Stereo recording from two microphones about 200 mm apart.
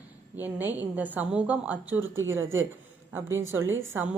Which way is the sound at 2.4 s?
75° right (ahead or behind).